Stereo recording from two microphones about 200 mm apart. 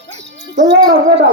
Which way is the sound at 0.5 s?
65° right (ahead or behind).